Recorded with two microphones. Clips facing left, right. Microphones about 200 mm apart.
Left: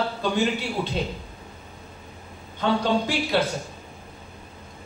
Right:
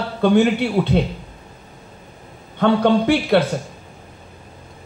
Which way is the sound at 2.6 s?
60° right (ahead or behind).